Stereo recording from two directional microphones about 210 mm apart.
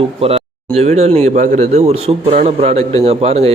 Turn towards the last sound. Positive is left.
turn(degrees=-30)  # may be behind; listen again after turning